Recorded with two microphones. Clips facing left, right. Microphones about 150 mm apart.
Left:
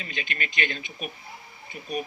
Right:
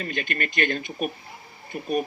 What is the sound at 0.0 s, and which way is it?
Speech, 50° right (ahead or behind).